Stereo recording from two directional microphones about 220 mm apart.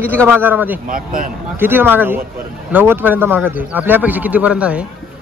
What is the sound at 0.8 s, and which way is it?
Speech, 40° right (ahead or behind).